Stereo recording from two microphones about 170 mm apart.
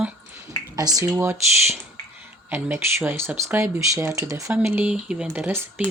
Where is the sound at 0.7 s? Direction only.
20° right (ahead or behind).